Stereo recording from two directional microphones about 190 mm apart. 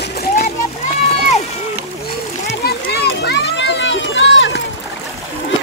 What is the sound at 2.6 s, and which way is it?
Run, 60° left (ahead or behind).